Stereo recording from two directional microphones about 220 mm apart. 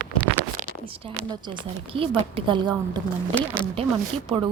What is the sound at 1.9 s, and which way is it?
A woman's voice, 25° right (ahead or behind).